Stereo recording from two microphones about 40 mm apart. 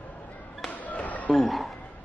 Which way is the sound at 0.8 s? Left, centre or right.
Left.